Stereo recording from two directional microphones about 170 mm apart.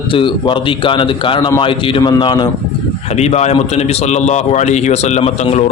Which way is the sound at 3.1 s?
40° left (ahead or behind).